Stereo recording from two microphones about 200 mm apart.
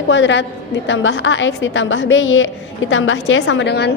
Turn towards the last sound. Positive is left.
turn(degrees=55)  # may be behind; listen again after turning